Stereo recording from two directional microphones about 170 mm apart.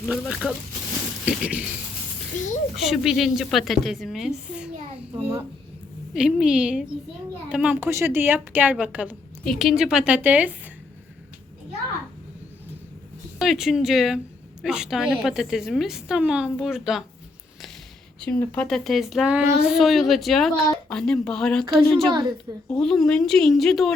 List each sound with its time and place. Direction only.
0.1 s a woman's voice: 5° right (ahead or behind)
2.3 s a child's voice: 45° left (ahead or behind)
2.7 s a woman's voice: centre (ahead or behind)
6.1 s a woman's voice: 5° right (ahead or behind)
13.4 s a woman's voice: centre (ahead or behind)
18.2 s a woman's voice: 5° left (ahead or behind)
22.1 s a child's voice: 25° right (ahead or behind)
22.7 s a woman's voice: 5° left (ahead or behind)